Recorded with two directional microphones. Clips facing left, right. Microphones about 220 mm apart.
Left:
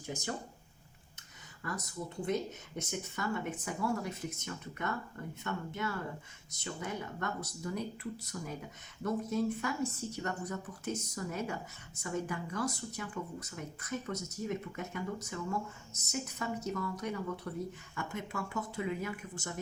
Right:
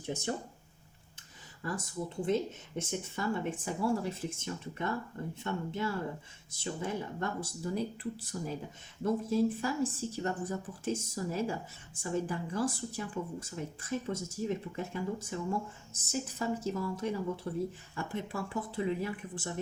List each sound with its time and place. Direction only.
1.6 s speech: 30° right (ahead or behind)